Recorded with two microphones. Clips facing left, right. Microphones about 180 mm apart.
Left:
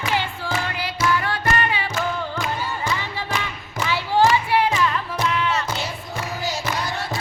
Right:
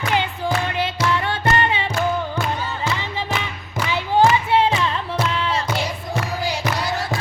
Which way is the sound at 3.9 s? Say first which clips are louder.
Right 2 dB; 20° right (ahead or behind).